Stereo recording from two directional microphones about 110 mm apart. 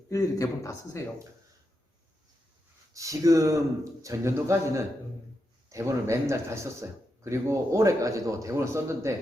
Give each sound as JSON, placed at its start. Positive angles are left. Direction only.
{"t": 0.1, "sound": "speech", "side_deg": 30}
{"t": 2.9, "sound": "speech", "side_deg": -30}